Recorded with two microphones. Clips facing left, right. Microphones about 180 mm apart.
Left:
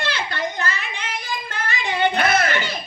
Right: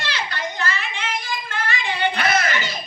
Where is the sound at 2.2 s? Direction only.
55° left (ahead or behind).